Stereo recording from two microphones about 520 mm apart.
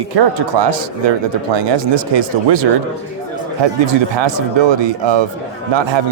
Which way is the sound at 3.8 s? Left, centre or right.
Right.